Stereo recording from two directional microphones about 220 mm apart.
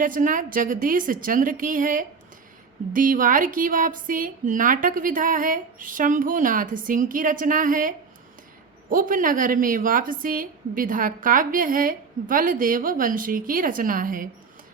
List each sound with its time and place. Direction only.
0.0 s a woman's voice: 35° right (ahead or behind)